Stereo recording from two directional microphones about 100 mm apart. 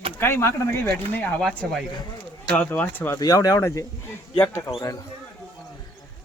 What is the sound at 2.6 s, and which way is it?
Speech, 15° left (ahead or behind).